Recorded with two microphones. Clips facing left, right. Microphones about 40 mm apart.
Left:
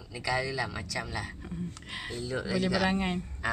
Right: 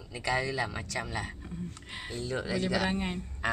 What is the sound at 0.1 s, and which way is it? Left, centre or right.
Speech, right.